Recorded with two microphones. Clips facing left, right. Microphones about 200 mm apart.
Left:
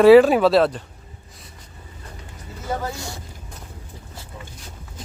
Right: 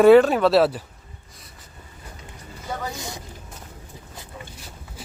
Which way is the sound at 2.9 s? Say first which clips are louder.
Even; 20° right (ahead or behind).